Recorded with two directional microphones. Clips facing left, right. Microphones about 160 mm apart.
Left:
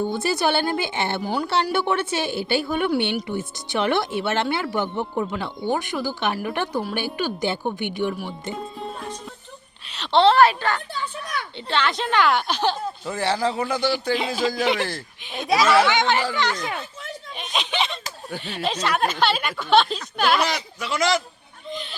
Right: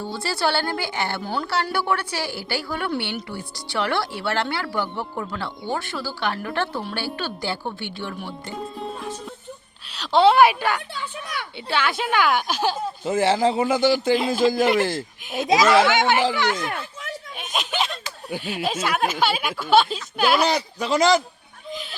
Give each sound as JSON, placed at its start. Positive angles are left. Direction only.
{"t": 0.0, "sound": "speech", "side_deg": 20}
{"t": 1.2, "sound": "a woman's voice", "side_deg": 10}
{"t": 1.7, "sound": "a woman's voice", "side_deg": 25}
{"t": 8.5, "sound": "music", "side_deg": 0}
{"t": 9.9, "sound": "a woman's voice", "side_deg": 0}
{"t": 13.1, "sound": "a man's voice", "side_deg": -20}
{"t": 13.7, "sound": "speech", "side_deg": -45}
{"t": 14.2, "sound": "speech", "side_deg": 0}
{"t": 15.9, "sound": "a woman's voice", "side_deg": -5}
{"t": 17.3, "sound": "a sound", "side_deg": -5}
{"t": 18.3, "sound": "speech", "side_deg": -5}
{"t": 20.4, "sound": "speech", "side_deg": -35}